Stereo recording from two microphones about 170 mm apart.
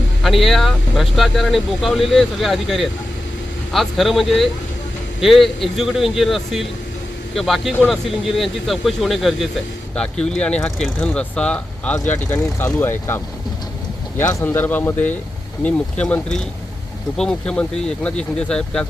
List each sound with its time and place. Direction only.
0.2 s speech: centre (ahead or behind)